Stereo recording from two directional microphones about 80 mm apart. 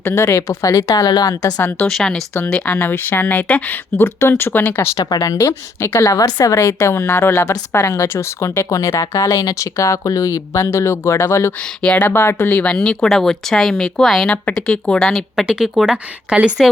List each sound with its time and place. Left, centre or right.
0.1 s a woman's voice: left
1.9 s speech: centre
2.6 s speech: left
5.0 s speech: left
5.3 s speech: left
6.0 s a woman's voice: left
11.9 s speech: left
12.7 s speech: centre
15.4 s speech: centre